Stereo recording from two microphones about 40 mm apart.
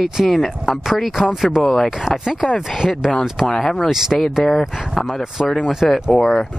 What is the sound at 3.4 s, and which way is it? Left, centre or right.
Speech, centre.